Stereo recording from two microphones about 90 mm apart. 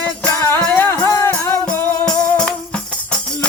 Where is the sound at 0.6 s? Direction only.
20° left (ahead or behind).